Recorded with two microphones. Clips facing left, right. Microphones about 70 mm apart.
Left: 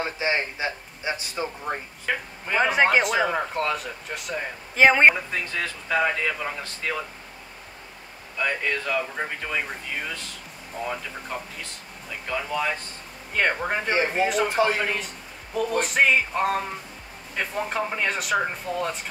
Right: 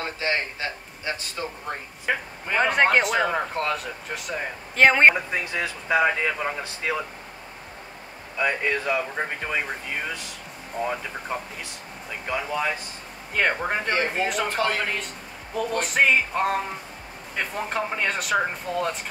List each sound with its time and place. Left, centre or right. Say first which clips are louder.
0.0 s speech: left 1 dB; centre
2.1 s speech: right 2 dB; centre
2.4 s speech: even; centre
5.1 s speech: right 2 dB; centre
8.4 s speech: right 2 dB; centre
13.3 s speech: even; centre
13.8 s speech: left 4 dB; centre
15.5 s speech: left 1 dB; centre